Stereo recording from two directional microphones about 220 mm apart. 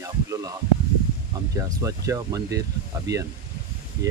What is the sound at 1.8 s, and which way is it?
Speech, 15° right (ahead or behind).